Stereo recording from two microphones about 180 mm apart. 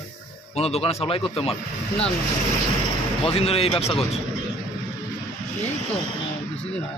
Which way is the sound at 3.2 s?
35° left (ahead or behind).